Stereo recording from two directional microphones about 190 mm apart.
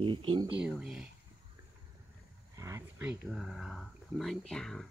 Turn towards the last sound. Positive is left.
turn(degrees=5)  # may be behind; listen again after turning